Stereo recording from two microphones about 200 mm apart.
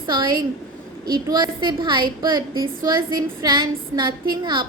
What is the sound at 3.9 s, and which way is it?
Speech, 20° right (ahead or behind).